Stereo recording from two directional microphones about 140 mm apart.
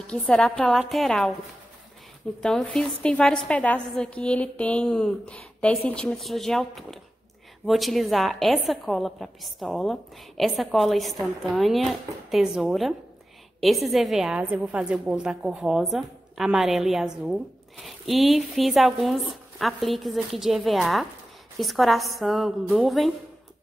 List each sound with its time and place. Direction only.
0.0 s a woman's voice: 5° left (ahead or behind)
2.4 s a woman's voice: 5° left (ahead or behind)